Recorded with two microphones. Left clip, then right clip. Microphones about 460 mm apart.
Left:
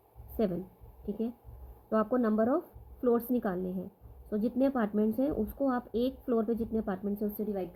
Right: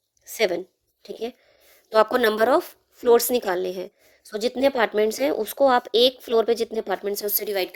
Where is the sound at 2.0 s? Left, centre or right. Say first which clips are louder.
Right 11 dB; right.